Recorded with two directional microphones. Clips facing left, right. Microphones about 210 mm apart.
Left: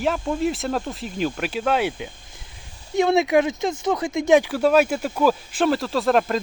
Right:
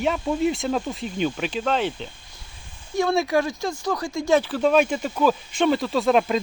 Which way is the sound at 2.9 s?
20° left (ahead or behind).